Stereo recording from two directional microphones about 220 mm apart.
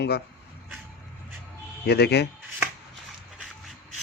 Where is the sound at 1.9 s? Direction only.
50° left (ahead or behind).